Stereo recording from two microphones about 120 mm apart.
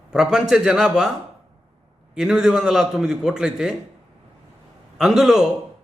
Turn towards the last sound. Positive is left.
turn(degrees=-5)  # may be behind; listen again after turning